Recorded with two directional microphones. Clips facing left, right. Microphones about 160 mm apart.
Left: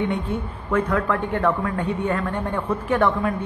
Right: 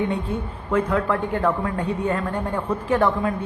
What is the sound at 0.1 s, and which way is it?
Speech, 30° right (ahead or behind).